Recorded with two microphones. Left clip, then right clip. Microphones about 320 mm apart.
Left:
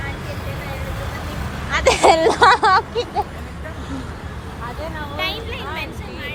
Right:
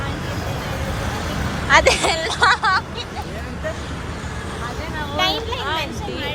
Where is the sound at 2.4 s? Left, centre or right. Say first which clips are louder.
Left 2 dB; centre.